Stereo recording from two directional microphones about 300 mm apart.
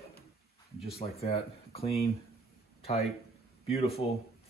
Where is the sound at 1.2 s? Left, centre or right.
Centre.